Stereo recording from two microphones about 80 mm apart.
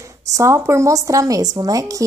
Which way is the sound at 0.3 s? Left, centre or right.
Right.